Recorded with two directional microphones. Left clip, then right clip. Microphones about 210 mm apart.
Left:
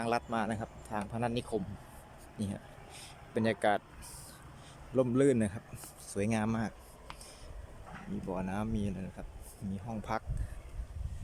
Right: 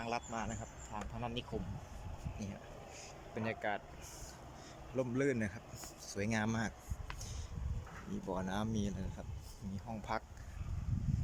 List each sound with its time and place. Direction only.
0.0 s speech: 20° left (ahead or behind)
4.9 s speech: 20° left (ahead or behind)
8.3 s speech: 5° left (ahead or behind)